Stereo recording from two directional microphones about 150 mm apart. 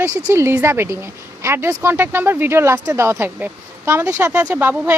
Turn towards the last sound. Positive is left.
turn(degrees=-15)  # may be behind; listen again after turning